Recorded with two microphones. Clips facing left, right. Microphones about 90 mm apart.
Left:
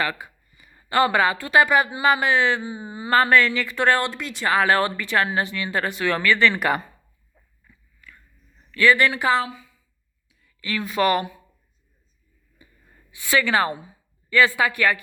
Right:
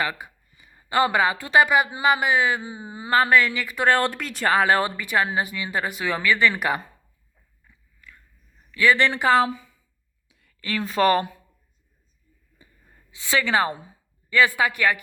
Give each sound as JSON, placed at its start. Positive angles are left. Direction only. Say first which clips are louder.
{"t": 0.0, "sound": "speech", "louder": "left 1 dB", "side_deg": -20}
{"t": 3.1, "sound": "speech", "louder": "left 1 dB", "side_deg": -5}
{"t": 4.1, "sound": "speech", "louder": "right 1 dB", "side_deg": -45}
{"t": 4.5, "sound": "speech", "louder": "left 1 dB", "side_deg": -20}
{"t": 8.7, "sound": "speech", "louder": "left 2 dB", "side_deg": -15}
{"t": 9.0, "sound": "speech", "louder": "even", "side_deg": -25}
{"t": 10.2, "sound": "a sound", "louder": "even", "side_deg": -90}
{"t": 10.6, "sound": "speech", "louder": "right 1 dB", "side_deg": -35}
{"t": 12.6, "sound": "a sound", "louder": "left 2 dB", "side_deg": -30}
{"t": 13.1, "sound": "speech", "louder": "left 2 dB", "side_deg": -25}